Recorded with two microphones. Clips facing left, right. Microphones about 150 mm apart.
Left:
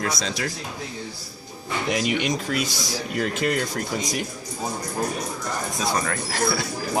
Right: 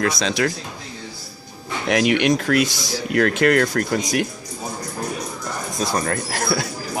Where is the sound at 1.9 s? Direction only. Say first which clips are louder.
Right 7 dB; 85° right; by 4.2 s 70° right (ahead or behind).